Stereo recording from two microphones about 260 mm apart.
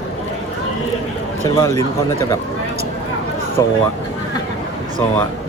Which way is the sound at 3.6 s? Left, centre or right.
Centre.